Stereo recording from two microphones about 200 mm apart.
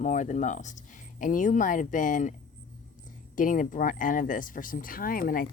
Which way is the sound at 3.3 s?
40° left (ahead or behind).